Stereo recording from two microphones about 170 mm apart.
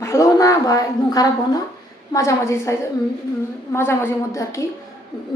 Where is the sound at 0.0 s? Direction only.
20° left (ahead or behind).